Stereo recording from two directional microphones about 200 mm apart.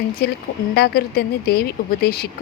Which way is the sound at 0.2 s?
50° left (ahead or behind).